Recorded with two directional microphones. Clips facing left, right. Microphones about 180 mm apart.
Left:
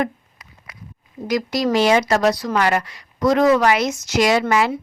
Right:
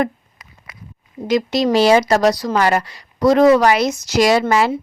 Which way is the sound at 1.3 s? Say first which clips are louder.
Right 3 dB; 25° right (ahead or behind).